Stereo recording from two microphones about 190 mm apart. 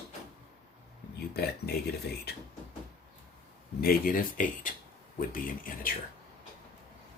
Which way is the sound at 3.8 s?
50° left (ahead or behind).